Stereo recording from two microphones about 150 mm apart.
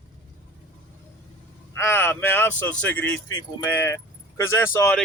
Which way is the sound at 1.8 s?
15° left (ahead or behind).